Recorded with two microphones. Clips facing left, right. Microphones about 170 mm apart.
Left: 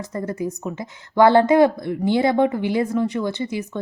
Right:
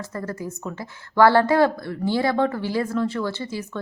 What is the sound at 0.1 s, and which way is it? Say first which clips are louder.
A woman's voice: left 8 dB; 20° left (ahead or behind).